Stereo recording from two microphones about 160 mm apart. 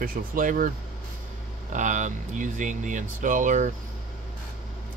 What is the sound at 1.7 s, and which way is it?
Speech, 50° right (ahead or behind).